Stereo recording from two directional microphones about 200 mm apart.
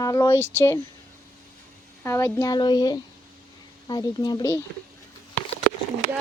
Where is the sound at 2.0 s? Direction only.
15° left (ahead or behind).